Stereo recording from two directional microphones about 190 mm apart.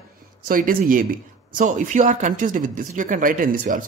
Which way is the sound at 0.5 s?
45° right (ahead or behind).